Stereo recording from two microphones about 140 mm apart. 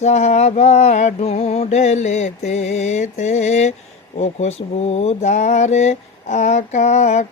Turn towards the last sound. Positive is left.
turn(degrees=55)  # may be behind; listen again after turning